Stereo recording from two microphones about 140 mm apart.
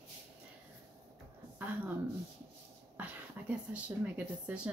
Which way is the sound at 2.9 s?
10° right (ahead or behind).